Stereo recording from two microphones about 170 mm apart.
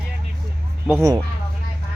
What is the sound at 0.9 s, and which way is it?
Speech, 20° right (ahead or behind).